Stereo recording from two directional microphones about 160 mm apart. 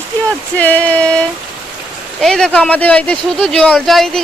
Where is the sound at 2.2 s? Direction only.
5° left (ahead or behind).